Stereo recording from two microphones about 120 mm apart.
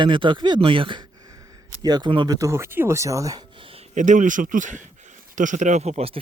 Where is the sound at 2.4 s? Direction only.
25° right (ahead or behind).